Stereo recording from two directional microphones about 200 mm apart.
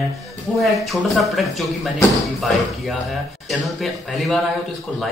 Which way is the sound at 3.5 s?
Centre (ahead or behind).